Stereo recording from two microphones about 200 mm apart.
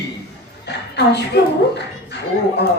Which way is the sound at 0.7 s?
55° left (ahead or behind).